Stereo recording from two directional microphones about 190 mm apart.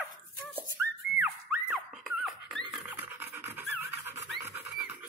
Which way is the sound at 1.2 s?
5° right (ahead or behind).